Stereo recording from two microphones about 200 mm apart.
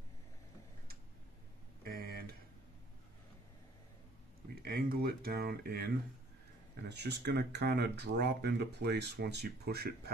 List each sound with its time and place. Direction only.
1.9 s a sound: 50° right (ahead or behind)
4.6 s speech: 50° right (ahead or behind)
6.9 s speech: 55° right (ahead or behind)